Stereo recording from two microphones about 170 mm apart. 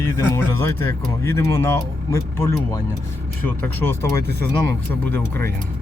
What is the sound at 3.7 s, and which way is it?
Speech, 10° left (ahead or behind).